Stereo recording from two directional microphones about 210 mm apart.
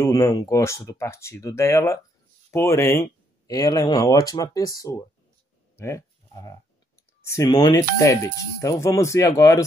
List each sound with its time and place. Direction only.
0.0 s speech: 15° left (ahead or behind)
5.8 s livestock: 15° left (ahead or behind)
7.2 s speech: 15° left (ahead or behind)